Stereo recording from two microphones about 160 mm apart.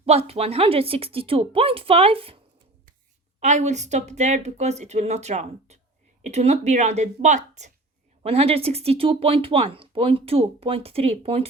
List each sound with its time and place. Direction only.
0.0 s speech: 40° right (ahead or behind)
3.4 s speech: 45° right (ahead or behind)